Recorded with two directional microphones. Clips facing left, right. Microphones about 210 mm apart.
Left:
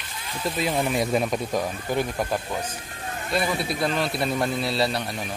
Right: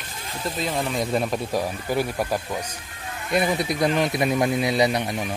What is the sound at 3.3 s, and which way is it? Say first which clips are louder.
A man's voice: right 3 dB; 20° right (ahead or behind).